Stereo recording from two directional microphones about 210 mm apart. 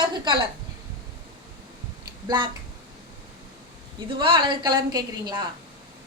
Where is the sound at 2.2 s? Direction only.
20° right (ahead or behind).